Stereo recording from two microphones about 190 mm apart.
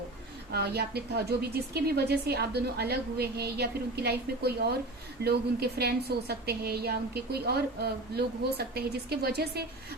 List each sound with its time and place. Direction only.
0.5 s a woman's voice: 55° right (ahead or behind)